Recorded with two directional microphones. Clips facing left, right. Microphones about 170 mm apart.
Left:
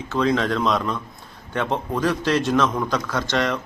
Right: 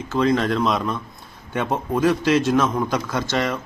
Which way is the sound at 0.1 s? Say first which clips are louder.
Right 1 dB; 5° right (ahead or behind).